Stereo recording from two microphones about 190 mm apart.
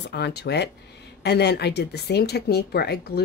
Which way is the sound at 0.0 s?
60° left (ahead or behind).